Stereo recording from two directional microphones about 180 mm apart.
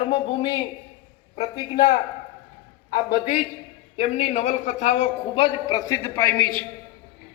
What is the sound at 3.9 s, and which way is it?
Speech, 40° left (ahead or behind).